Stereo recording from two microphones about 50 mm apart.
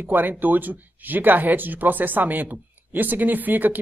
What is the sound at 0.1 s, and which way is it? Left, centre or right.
Speech, right.